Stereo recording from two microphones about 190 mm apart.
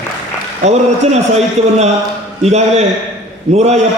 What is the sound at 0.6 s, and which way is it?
Speech, 35° right (ahead or behind).